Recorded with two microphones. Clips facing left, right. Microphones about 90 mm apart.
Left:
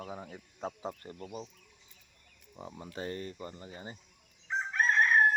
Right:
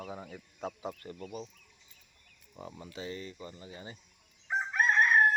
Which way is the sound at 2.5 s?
20° left (ahead or behind).